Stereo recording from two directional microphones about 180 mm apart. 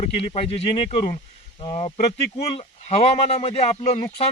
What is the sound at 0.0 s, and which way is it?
Speech, 35° left (ahead or behind).